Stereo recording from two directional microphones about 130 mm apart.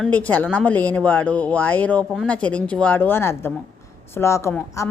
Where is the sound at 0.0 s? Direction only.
10° left (ahead or behind).